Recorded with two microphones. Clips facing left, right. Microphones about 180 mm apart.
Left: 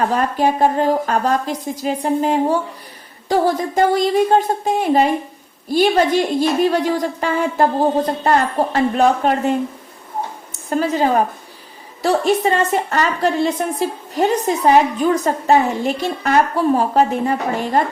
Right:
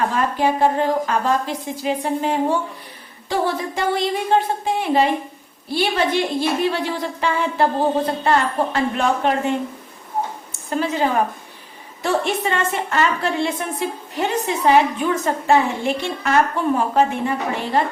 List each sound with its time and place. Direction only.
0.1 s a woman's voice: 40° left (ahead or behind)
10.7 s a woman's voice: 40° left (ahead or behind)